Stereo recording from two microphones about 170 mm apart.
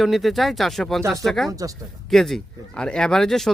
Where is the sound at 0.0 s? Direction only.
Centre (ahead or behind).